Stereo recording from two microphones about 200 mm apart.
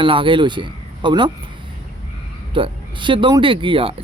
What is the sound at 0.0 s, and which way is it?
Speech, 25° right (ahead or behind).